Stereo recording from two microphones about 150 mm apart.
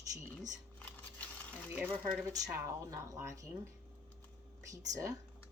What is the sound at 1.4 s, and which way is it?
Speech, 10° left (ahead or behind).